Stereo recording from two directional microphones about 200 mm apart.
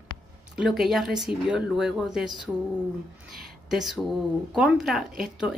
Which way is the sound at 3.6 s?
Centre (ahead or behind).